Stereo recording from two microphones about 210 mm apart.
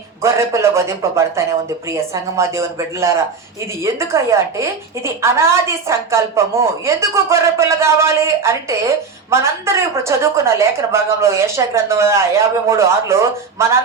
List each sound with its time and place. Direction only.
0.2 s a woman's voice: 15° right (ahead or behind)